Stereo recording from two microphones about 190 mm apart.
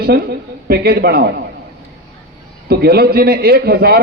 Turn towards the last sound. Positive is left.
turn(degrees=-55)  # may be behind; listen again after turning